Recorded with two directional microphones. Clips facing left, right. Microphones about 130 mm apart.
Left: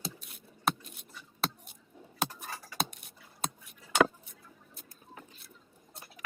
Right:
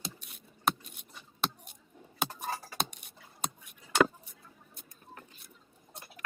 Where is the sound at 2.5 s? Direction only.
30° right (ahead or behind).